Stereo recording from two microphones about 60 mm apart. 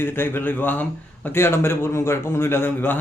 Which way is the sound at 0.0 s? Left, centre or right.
Left.